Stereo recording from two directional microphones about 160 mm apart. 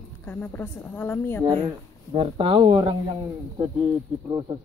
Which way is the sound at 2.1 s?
35° right (ahead or behind).